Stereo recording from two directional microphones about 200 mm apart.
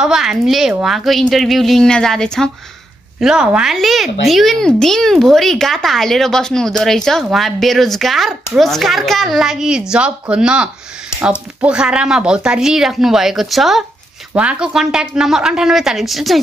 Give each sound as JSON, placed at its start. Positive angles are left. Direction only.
{"t": 0.0, "sound": "speech", "side_deg": 0}